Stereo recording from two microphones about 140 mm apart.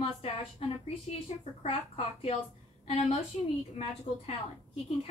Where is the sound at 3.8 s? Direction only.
50° left (ahead or behind).